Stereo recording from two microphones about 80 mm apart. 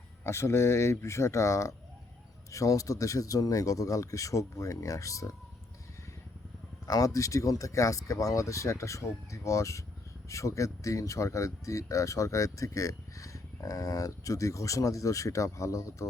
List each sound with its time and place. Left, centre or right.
0.3 s speech: left
6.8 s speech: left